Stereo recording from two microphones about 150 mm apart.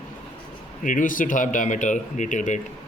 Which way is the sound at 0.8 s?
60° left (ahead or behind).